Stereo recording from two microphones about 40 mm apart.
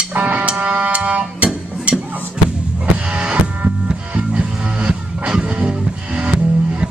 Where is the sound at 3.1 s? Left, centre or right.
Right.